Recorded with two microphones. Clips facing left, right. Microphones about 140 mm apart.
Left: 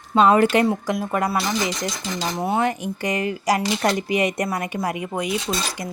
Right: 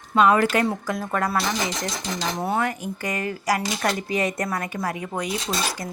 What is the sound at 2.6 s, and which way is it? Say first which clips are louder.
Speech: left 4 dB; 20° left (ahead or behind).